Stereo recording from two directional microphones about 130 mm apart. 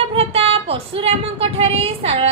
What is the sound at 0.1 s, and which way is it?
Speech, 50° right (ahead or behind).